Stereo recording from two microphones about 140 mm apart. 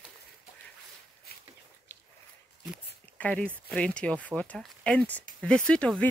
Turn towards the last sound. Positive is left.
turn(degrees=10)  # may be behind; listen again after turning